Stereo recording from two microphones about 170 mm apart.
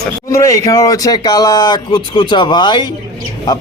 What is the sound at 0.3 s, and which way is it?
Speech, 15° left (ahead or behind).